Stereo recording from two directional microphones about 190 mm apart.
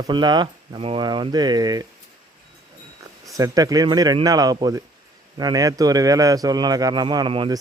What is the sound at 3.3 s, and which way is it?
A man's voice, 20° right (ahead or behind).